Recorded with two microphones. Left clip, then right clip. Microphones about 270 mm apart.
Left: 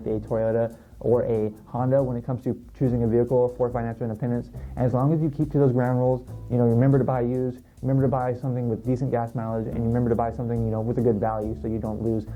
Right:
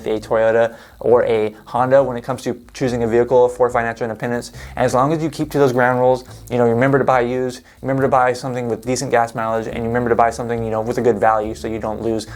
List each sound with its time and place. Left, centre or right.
0.0 s speech: centre
3.2 s speech: right
3.7 s speech: centre